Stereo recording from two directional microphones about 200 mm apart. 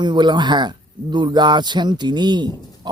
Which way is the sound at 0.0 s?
20° right (ahead or behind).